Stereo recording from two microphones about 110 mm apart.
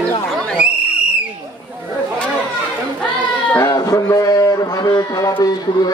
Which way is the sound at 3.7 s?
35° left (ahead or behind).